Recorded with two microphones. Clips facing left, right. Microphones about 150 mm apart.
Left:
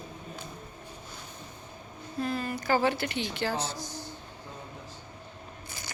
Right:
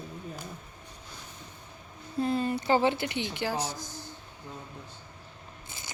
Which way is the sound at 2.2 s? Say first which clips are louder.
Right 4 dB; 25° right (ahead or behind).